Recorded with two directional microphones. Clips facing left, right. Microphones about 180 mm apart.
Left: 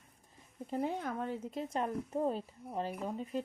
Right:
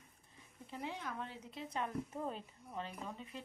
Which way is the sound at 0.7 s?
45° left (ahead or behind).